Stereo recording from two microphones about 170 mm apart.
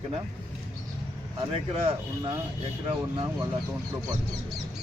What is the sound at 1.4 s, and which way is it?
Speech, 35° right (ahead or behind).